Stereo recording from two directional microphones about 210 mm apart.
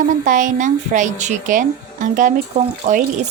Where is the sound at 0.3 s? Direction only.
40° right (ahead or behind).